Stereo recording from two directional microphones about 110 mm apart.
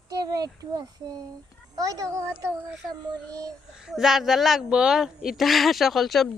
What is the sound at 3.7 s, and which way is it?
A woman's voice, 5° right (ahead or behind).